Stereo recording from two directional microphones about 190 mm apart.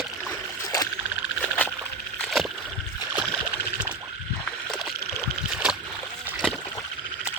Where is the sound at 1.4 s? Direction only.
10° left (ahead or behind).